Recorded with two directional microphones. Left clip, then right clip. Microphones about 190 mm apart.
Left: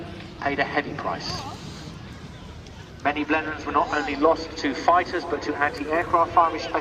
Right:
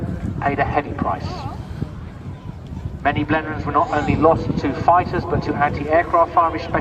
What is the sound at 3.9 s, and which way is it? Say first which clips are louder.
Speech: right 5 dB; 40° left (ahead or behind).